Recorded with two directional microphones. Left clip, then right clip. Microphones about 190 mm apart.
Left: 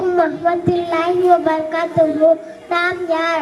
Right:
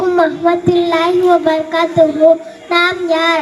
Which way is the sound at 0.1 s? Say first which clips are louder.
Right 3 dB; 25° right (ahead or behind).